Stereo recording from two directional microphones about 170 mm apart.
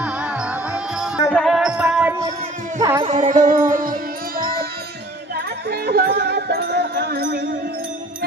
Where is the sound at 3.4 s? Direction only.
55° right (ahead or behind).